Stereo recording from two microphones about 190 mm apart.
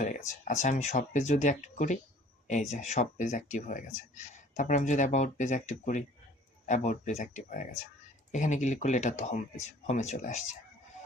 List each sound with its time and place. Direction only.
0.0 s speech: 40° left (ahead or behind)